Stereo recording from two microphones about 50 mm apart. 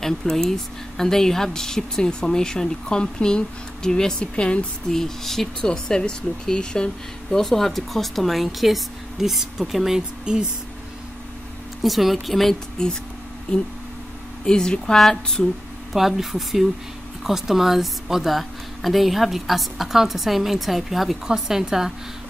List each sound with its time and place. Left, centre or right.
0.0 s a woman's voice: centre
4.8 s a woman's voice: centre
7.2 s a woman's voice: centre
11.8 s a woman's voice: centre
14.4 s a woman's voice: centre
15.9 s a woman's voice: centre